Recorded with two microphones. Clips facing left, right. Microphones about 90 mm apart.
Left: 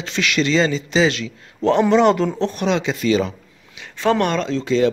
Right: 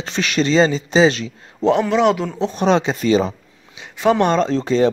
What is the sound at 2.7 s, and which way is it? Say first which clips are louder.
Speech: right 4 dB; 35° right (ahead or behind).